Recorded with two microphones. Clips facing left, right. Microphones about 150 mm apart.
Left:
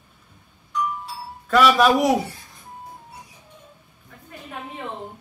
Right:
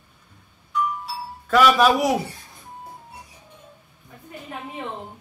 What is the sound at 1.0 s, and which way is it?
Music, centre (ahead or behind).